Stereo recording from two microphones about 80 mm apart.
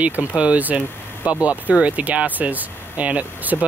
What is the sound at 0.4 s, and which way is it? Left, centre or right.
Speech, centre.